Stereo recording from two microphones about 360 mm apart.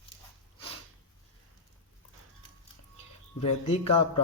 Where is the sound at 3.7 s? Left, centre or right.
Centre.